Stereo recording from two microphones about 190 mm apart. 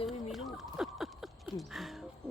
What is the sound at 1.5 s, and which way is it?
Speech, centre (ahead or behind).